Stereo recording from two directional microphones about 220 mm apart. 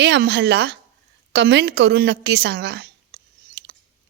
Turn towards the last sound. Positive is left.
turn(degrees=-50)  # may be behind; listen again after turning